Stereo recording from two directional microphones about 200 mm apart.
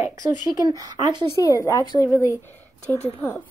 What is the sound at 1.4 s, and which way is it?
A woman's voice, 15° left (ahead or behind).